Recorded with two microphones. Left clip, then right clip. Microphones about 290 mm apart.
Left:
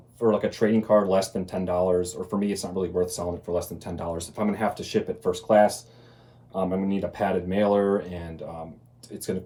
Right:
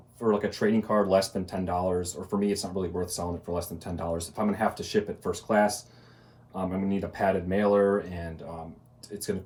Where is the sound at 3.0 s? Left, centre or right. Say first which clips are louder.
Left 4 dB; centre.